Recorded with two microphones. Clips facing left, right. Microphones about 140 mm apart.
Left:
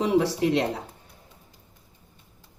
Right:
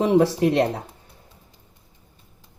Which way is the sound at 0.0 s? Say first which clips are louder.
Right 4 dB; 50° right (ahead or behind).